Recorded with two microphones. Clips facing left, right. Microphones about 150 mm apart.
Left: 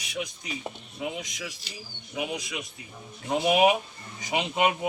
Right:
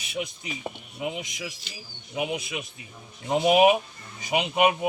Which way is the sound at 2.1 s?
20° right (ahead or behind).